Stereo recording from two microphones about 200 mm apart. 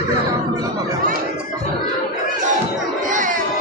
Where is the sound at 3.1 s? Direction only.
40° right (ahead or behind).